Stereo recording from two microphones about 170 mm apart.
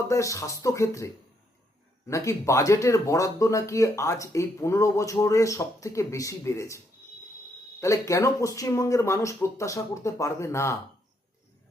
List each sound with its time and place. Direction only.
0.1 s speech: 20° left (ahead or behind)